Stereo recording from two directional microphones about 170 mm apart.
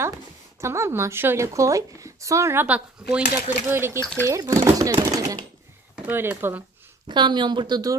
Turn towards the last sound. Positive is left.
turn(degrees=-25)  # may be behind; listen again after turning